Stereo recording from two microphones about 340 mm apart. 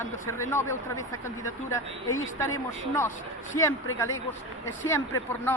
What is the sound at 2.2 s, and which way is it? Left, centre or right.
Speech, centre.